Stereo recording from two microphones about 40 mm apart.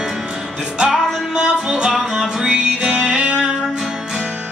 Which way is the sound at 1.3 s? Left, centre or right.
Centre.